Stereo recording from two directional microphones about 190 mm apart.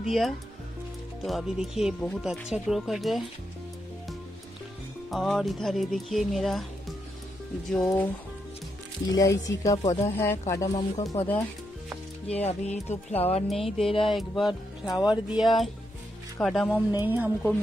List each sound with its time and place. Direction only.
0.0 s speech: centre (ahead or behind)
5.1 s speech: centre (ahead or behind)
7.7 s speech: 5° left (ahead or behind)
9.1 s speech: 20° left (ahead or behind)
12.3 s speech: 35° left (ahead or behind)
13.5 s speech: centre (ahead or behind)
17.0 s a woman's voice: 10° right (ahead or behind)